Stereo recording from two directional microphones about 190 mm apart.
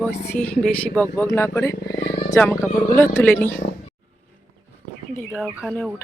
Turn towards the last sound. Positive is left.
turn(degrees=5)  # may be behind; listen again after turning